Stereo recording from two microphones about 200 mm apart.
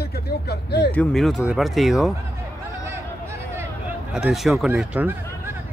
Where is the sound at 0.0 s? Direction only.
50° left (ahead or behind).